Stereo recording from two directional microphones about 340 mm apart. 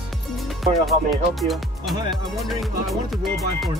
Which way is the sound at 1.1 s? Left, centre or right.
Centre.